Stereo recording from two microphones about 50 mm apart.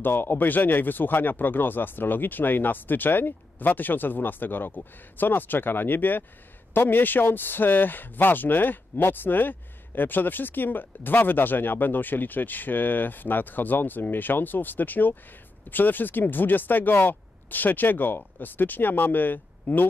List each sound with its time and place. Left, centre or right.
0.0 s a man's voice: left